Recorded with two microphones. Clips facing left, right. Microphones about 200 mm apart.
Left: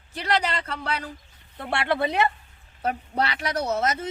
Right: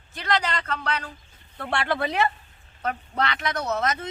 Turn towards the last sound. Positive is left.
turn(degrees=30)  # may be behind; listen again after turning